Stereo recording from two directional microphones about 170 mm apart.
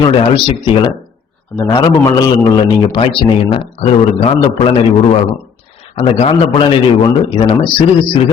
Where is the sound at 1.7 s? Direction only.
25° left (ahead or behind).